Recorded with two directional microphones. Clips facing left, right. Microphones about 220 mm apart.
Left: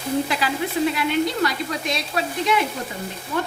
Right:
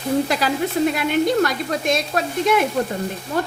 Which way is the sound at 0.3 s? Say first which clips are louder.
Right 3 dB; 40° right (ahead or behind).